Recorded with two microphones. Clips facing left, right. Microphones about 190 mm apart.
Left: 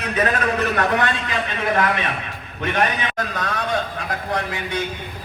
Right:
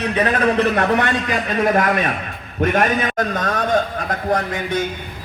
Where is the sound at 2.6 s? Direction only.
45° right (ahead or behind).